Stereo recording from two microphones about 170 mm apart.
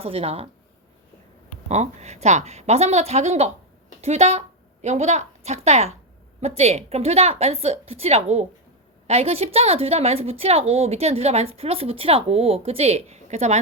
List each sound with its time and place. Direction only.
0.0 s a woman's voice: 35° right (ahead or behind)
1.6 s a woman's voice: 40° right (ahead or behind)